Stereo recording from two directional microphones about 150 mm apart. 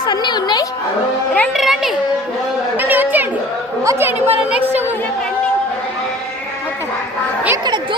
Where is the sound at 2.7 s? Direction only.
10° right (ahead or behind).